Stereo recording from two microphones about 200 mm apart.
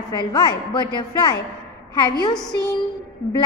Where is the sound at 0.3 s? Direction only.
20° left (ahead or behind).